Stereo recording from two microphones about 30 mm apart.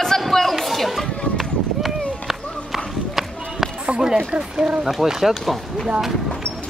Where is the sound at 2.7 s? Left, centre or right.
Centre.